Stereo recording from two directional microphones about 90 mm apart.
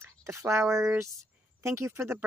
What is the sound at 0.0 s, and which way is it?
Speech, 30° right (ahead or behind).